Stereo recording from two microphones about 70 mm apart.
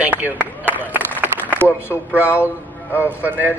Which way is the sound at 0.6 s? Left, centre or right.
Right.